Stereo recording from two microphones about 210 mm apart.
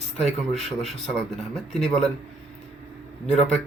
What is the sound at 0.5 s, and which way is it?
Speech, centre (ahead or behind).